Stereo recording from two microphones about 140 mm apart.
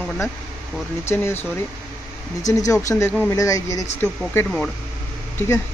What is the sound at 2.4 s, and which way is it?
Speech, 25° left (ahead or behind).